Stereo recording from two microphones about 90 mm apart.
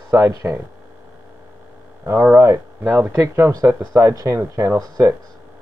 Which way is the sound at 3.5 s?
40° right (ahead or behind).